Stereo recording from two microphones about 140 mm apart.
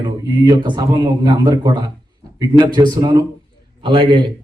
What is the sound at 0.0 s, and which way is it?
Speech, 30° right (ahead or behind).